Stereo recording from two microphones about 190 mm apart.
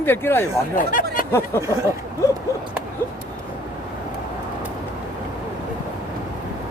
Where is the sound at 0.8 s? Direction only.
45° left (ahead or behind).